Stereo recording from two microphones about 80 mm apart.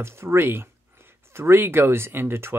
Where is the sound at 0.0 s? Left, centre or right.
Right.